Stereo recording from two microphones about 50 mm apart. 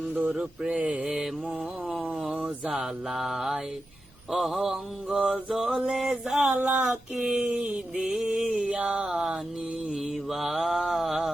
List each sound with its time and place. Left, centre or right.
0.3 s mantra: centre
0.8 s mantra: right
1.1 s mantra: centre
2.6 s mantra: centre
6.6 s mantra: right
9.9 s mantra: centre